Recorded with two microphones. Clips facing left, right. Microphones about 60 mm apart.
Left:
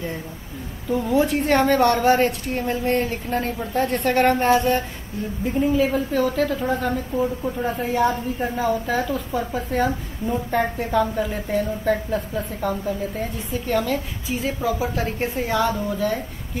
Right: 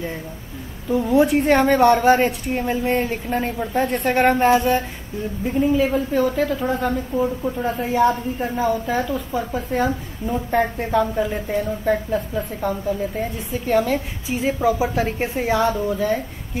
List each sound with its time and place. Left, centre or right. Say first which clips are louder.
0.8 s a woman's voice: right 3 dB; centre
13.7 s a woman's voice: right 4 dB; centre
14.3 s a woman's voice: right 4 dB; right; by 15.7 s centre